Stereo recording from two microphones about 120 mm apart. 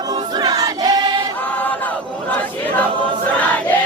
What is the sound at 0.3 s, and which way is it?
Choir, 30° right (ahead or behind).